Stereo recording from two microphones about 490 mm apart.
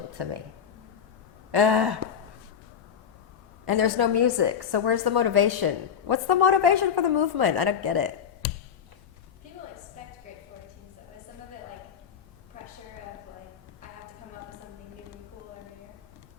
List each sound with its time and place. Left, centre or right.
0.2 s a woman's voice: right
1.5 s a woman's voice: right
3.7 s a woman's voice: right